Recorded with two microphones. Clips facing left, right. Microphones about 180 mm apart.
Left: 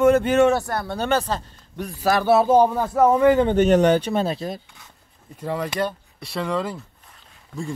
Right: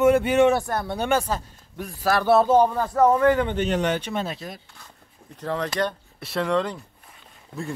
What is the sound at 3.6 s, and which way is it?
Speech, 45° left (ahead or behind).